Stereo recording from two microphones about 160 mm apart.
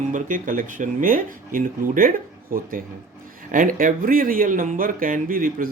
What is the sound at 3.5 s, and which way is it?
Speech, 55° right (ahead or behind).